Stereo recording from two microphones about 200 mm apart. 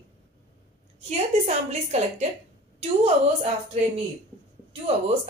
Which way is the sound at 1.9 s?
35° right (ahead or behind).